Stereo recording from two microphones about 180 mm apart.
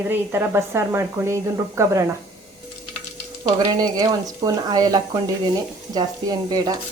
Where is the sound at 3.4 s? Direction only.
25° right (ahead or behind).